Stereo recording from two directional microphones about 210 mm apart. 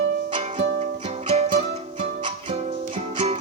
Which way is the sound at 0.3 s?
30° right (ahead or behind).